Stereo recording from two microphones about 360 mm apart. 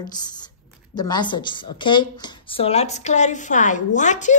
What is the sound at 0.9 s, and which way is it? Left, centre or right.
A woman's voice, centre.